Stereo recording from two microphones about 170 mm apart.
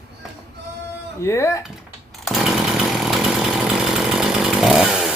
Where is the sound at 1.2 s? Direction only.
15° left (ahead or behind).